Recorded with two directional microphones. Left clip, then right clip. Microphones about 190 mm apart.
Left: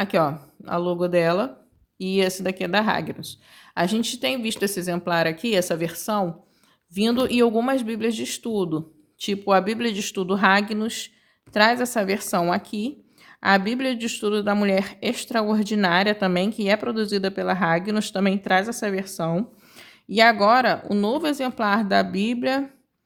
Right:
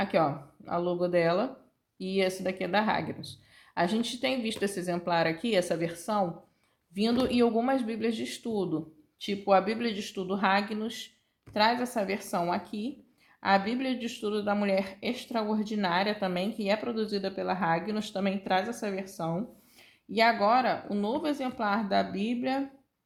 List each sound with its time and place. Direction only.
0.0 s speech: 45° left (ahead or behind)